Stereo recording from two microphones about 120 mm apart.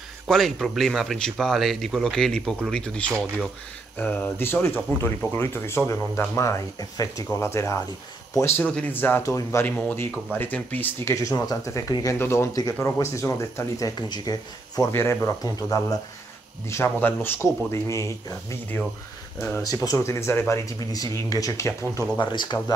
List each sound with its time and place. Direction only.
0.3 s speech: centre (ahead or behind); by 9.7 s 25° left (ahead or behind)
9.7 s speech: 10° left (ahead or behind)
11.1 s speech: 25° left (ahead or behind)
22.3 s speech: 40° left (ahead or behind)